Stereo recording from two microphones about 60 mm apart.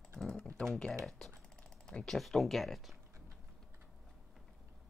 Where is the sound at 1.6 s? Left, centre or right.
Centre.